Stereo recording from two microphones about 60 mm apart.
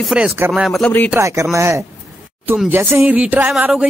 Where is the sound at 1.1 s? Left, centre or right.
Right.